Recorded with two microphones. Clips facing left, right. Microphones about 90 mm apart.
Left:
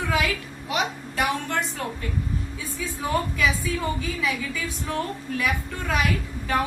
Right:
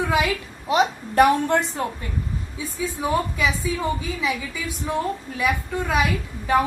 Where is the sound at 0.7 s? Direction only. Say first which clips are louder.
Right 7 dB; 30° right (ahead or behind).